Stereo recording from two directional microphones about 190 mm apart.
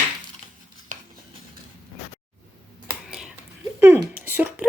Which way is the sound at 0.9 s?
45° right (ahead or behind).